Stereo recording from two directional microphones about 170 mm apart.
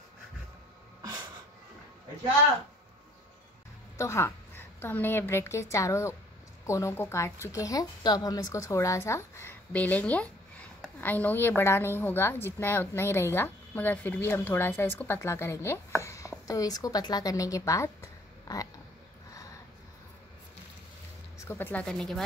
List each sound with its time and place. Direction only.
4.0 s a woman's voice: 15° left (ahead or behind)
21.5 s a woman's voice: 10° left (ahead or behind)